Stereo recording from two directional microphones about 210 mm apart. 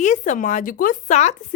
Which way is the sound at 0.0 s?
35° left (ahead or behind).